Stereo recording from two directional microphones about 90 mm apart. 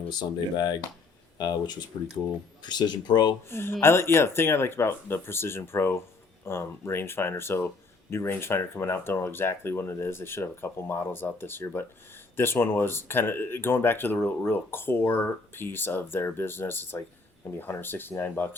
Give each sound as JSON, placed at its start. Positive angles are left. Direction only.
{"t": 0.1, "sound": "speech", "side_deg": 50}
{"t": 3.5, "sound": "speech", "side_deg": 25}